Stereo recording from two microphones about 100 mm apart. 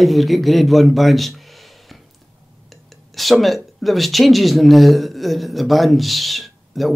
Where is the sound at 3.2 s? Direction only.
Centre (ahead or behind).